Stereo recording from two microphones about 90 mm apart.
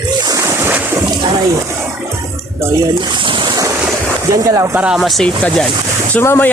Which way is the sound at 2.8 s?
60° right (ahead or behind).